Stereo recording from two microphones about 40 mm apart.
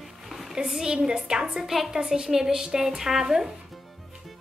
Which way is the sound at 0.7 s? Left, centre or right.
Centre.